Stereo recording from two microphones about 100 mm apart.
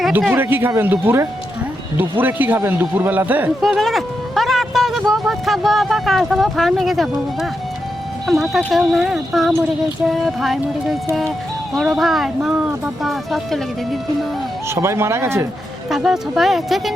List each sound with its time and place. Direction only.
0.3 s a man's voice: 20° right (ahead or behind)
3.6 s speech: centre (ahead or behind)
8.3 s speech: centre (ahead or behind)
14.8 s speech: 25° right (ahead or behind)
15.9 s speech: 5° right (ahead or behind)